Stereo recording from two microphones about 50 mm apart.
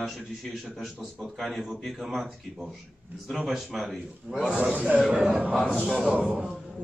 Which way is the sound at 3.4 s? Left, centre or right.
Centre.